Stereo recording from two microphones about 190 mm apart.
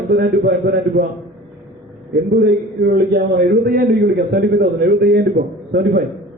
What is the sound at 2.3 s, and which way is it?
A man's voice, 55° right (ahead or behind).